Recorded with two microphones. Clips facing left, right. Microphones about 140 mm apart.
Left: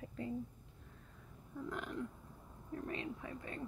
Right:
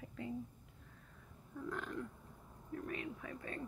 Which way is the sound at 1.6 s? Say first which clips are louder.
Even; 15° left (ahead or behind).